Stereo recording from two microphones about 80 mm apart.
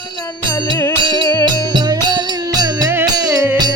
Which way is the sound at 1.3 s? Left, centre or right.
Left.